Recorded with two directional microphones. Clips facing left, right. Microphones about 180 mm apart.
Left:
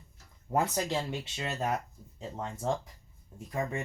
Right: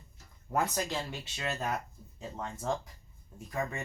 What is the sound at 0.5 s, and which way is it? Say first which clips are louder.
Speech: left 2 dB; 25° left (ahead or behind).